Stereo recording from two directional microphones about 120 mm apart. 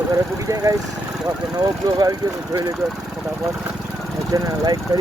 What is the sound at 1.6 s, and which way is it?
Speech, 30° right (ahead or behind).